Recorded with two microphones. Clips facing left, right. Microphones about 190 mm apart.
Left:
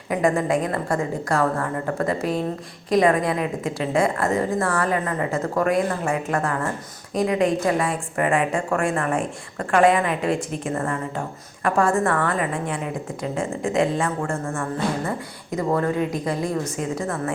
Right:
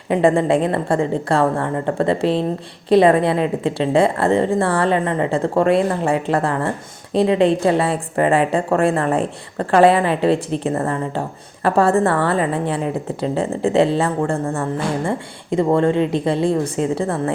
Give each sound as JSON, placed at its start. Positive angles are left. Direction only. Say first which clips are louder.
{"t": 0.1, "sound": "a woman's voice", "louder": "right 5 dB", "side_deg": -30}